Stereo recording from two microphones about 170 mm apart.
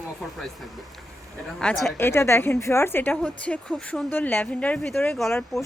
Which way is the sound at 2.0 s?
15° left (ahead or behind).